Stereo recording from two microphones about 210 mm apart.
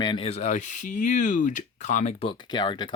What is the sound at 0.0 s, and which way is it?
Speech, 25° left (ahead or behind).